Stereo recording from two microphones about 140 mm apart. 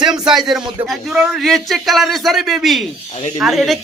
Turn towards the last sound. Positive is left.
turn(degrees=0)  # may be behind; listen again after turning